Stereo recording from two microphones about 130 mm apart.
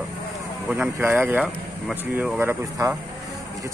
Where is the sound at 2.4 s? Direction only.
20° right (ahead or behind).